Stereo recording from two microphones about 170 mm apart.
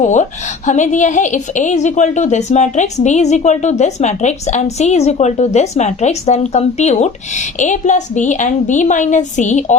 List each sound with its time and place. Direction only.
0.0 s a woman's voice: 45° left (ahead or behind)